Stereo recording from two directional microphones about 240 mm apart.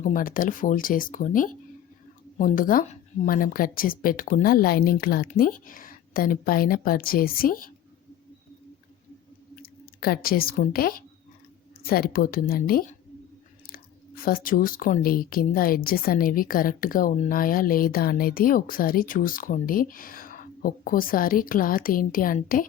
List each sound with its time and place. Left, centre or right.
0.0 s speech: left
9.6 s speech: left